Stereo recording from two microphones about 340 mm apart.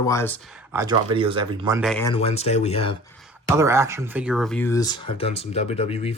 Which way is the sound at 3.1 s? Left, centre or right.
Centre.